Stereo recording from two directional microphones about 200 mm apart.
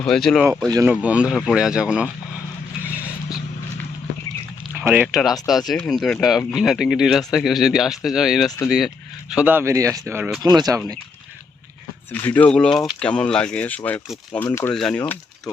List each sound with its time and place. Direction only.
0.0 s speech: 5° left (ahead or behind)
4.7 s speech: 10° right (ahead or behind)
8.4 s speech: 15° left (ahead or behind)
9.3 s speech: 10° right (ahead or behind)
12.1 s speech: 10° left (ahead or behind)